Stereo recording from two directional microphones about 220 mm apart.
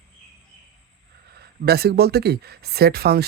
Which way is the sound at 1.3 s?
45° right (ahead or behind).